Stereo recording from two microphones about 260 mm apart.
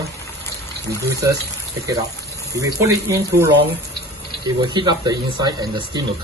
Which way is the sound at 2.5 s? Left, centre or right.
Centre.